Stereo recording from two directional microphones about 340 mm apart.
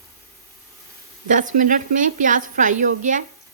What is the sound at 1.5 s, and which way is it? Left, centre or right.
A woman's voice, right.